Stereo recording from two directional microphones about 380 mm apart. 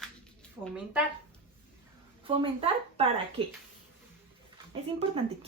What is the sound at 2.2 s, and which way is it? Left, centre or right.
Speech, centre.